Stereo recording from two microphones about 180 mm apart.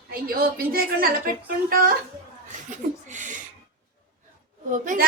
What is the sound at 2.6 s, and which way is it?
Chuckle, 45° right (ahead or behind).